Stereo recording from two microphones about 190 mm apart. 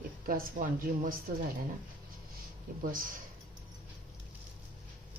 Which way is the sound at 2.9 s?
45° right (ahead or behind).